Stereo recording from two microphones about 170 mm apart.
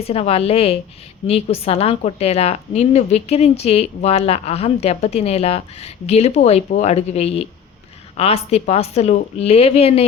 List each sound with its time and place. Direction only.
0.0 s a woman's voice: 35° left (ahead or behind)